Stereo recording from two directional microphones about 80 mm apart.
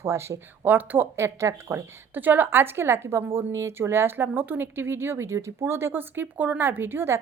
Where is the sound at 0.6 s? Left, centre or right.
Right.